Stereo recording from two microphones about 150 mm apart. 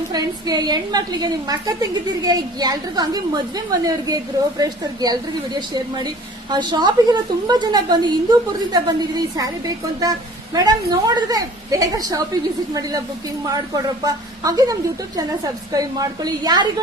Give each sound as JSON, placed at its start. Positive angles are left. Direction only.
{"t": 0.1, "sound": "a woman's voice", "side_deg": -25}
{"t": 13.4, "sound": "a woman's voice", "side_deg": -25}